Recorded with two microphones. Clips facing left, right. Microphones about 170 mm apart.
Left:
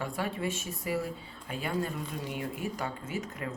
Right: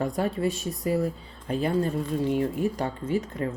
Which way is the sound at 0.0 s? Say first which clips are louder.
Right 7 dB; 40° right (ahead or behind).